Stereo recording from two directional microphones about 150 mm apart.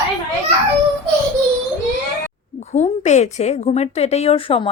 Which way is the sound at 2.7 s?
50° left (ahead or behind).